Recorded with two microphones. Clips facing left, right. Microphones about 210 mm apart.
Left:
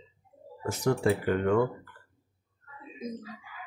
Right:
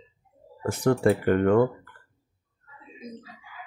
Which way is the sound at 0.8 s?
55° right (ahead or behind).